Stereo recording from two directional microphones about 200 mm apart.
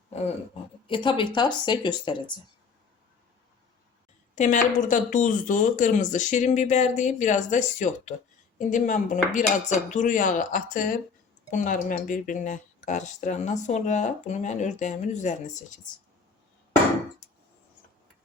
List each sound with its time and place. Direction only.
0.1 s speech: 30° left (ahead or behind)
4.4 s speech: 40° left (ahead or behind)